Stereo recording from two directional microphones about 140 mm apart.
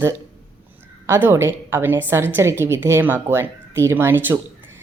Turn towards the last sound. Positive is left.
turn(degrees=-15)  # may be behind; listen again after turning